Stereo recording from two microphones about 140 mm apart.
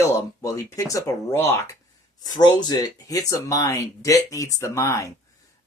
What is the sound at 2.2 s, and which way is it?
Speech, 30° left (ahead or behind).